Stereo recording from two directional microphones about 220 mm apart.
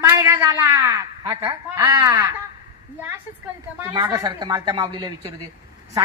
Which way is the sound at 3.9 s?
20° right (ahead or behind).